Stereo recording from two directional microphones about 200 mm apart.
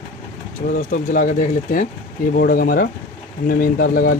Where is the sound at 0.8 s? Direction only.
40° left (ahead or behind).